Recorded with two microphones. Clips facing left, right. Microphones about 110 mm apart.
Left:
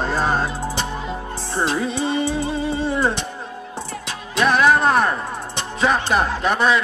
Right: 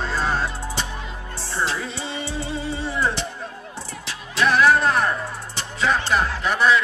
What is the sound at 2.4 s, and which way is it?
Music, 20° left (ahead or behind).